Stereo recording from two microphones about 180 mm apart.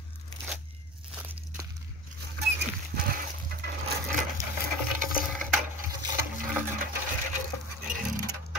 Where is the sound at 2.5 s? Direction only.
55° right (ahead or behind).